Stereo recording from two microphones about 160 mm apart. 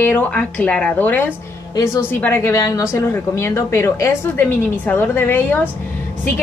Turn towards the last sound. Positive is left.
turn(degrees=10)  # may be behind; listen again after turning